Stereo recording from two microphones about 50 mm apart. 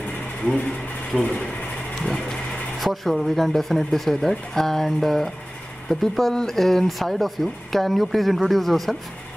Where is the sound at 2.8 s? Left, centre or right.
Centre.